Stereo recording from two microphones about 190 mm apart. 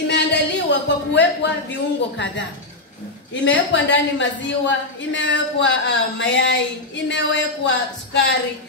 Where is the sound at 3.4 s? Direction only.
75° left (ahead or behind).